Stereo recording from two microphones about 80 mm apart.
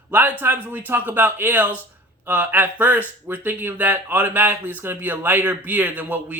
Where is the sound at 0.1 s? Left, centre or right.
Right.